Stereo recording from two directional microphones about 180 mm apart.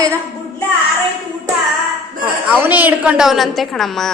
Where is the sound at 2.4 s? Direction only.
10° right (ahead or behind).